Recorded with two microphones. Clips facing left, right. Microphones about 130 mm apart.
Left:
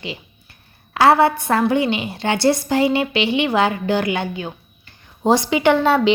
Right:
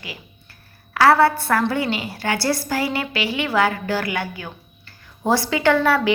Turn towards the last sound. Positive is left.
turn(degrees=20)  # may be behind; listen again after turning